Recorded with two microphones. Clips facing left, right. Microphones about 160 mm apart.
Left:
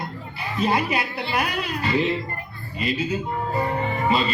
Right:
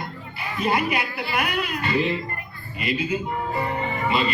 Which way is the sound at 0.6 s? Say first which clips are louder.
Left 1 dB; 35° left (ahead or behind).